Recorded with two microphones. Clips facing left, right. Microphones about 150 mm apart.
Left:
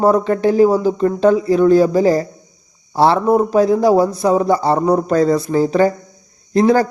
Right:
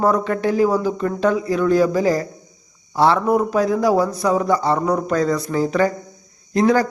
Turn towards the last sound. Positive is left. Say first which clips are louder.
# left 3 dB
turn(degrees=30)  # may be behind; listen again after turning